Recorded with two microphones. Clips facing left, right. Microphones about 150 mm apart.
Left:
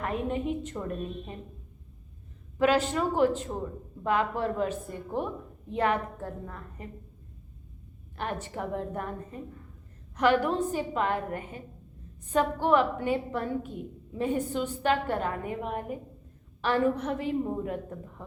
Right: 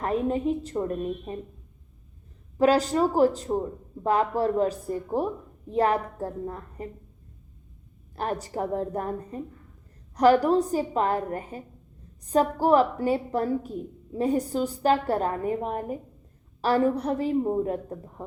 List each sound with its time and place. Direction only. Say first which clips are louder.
0.0 s a woman's voice: right 5 dB; 35° right (ahead or behind)
2.6 s a woman's voice: right 4 dB; 35° right (ahead or behind)
8.1 s a woman's voice: right 4 dB; 35° right (ahead or behind)